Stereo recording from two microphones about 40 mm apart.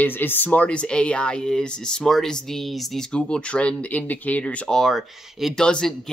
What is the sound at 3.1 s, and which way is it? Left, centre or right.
Speech, left.